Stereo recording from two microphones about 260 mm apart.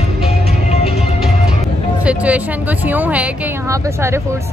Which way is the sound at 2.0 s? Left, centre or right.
Centre.